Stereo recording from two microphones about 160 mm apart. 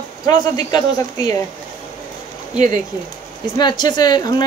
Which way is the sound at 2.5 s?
50° right (ahead or behind).